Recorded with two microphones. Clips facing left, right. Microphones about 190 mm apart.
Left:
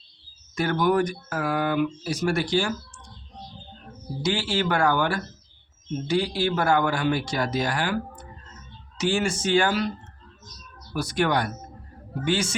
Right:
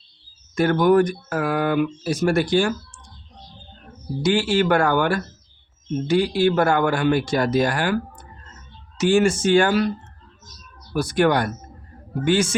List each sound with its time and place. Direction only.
0.5 s speech: 55° right (ahead or behind)
4.2 s speech: 55° right (ahead or behind)
9.0 s speech: 50° right (ahead or behind)
10.9 s speech: 50° right (ahead or behind)